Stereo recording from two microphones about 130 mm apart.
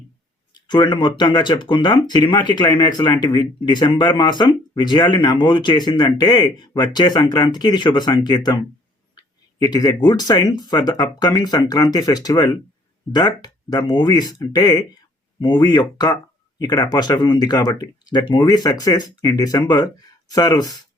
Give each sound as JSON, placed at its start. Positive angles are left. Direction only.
{"t": 0.9, "sound": "speech", "side_deg": 35}